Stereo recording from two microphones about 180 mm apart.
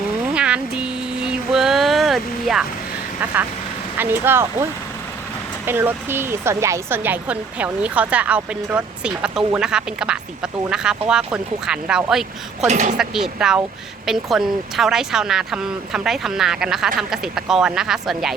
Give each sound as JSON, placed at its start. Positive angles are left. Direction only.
{"t": 0.3, "sound": "a sound", "side_deg": -5}
{"t": 3.9, "sound": "a woman's voice", "side_deg": -10}
{"t": 5.6, "sound": "a woman's voice", "side_deg": -10}
{"t": 12.6, "sound": "speech", "side_deg": -40}
{"t": 13.0, "sound": "speech", "side_deg": -5}